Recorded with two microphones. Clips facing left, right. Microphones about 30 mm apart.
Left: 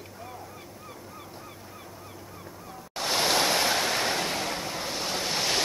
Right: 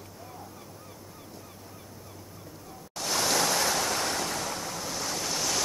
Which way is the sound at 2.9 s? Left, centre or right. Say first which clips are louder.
Left 2 dB; left.